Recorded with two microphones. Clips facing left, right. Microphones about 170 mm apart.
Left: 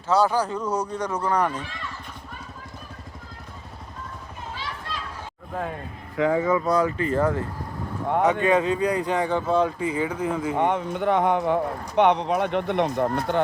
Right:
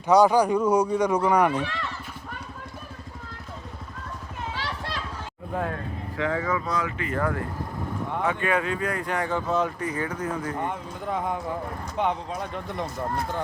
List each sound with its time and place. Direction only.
0.1 s speech: 15° right (ahead or behind)
1.5 s speech: 70° right (ahead or behind)
4.5 s a sound: 80° right
6.1 s speech: 20° left (ahead or behind)
6.7 s speech: 35° left (ahead or behind)
7.2 s speech: 20° left (ahead or behind)
10.5 s speech: 75° left (ahead or behind)